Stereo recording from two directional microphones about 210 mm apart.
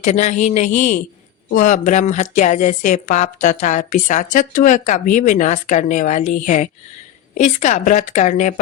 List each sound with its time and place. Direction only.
0.0 s speech: 35° left (ahead or behind)